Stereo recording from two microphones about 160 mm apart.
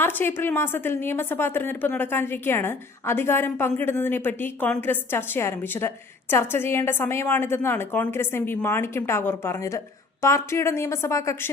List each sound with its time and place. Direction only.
0.0 s a woman's voice: 15° left (ahead or behind)